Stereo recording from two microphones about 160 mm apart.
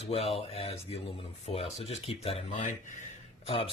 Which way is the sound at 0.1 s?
40° left (ahead or behind).